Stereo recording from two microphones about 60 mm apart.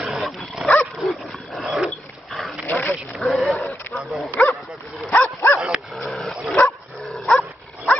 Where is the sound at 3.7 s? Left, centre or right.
Left.